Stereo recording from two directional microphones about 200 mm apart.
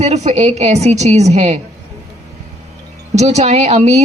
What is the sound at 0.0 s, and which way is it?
Speech, 35° right (ahead or behind).